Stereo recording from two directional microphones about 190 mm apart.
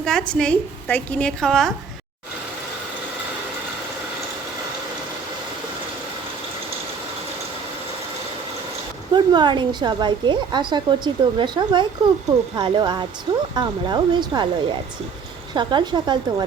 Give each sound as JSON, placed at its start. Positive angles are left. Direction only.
{"t": 0.0, "sound": "a woman's voice", "side_deg": 5}
{"t": 9.1, "sound": "speech", "side_deg": -25}